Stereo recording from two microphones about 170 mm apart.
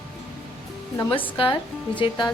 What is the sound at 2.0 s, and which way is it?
Speech, 30° left (ahead or behind).